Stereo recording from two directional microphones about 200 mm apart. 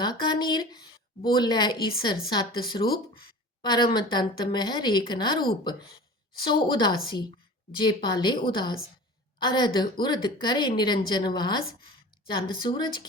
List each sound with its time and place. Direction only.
0.0 s a woman's voice: 20° left (ahead or behind)